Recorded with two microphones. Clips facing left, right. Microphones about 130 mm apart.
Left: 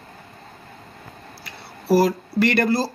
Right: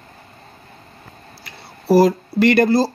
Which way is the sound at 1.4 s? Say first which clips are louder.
Left 1 dB; 20° right (ahead or behind).